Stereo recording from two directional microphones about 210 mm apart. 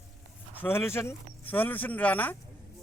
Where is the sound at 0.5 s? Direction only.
10° left (ahead or behind).